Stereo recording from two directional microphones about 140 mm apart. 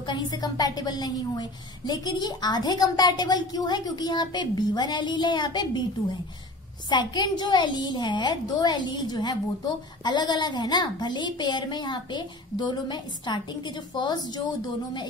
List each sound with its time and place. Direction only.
0.0 s a woman's voice: 35° left (ahead or behind)
6.9 s a woman's voice: 30° left (ahead or behind)